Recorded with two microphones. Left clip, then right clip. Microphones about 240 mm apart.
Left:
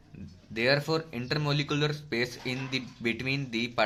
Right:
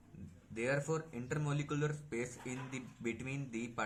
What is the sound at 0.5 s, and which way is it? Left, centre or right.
Speech, left.